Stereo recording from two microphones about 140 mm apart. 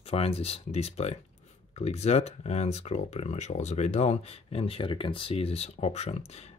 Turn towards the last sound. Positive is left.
turn(degrees=50)  # may be behind; listen again after turning